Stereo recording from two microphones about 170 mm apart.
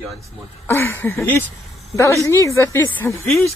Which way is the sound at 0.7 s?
15° left (ahead or behind).